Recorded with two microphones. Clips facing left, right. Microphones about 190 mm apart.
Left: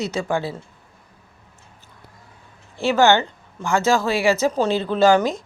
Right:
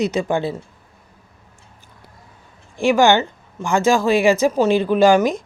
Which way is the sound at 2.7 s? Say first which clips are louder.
Right 2 dB; 15° right (ahead or behind).